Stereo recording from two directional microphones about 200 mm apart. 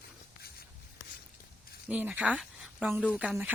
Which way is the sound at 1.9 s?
5° right (ahead or behind).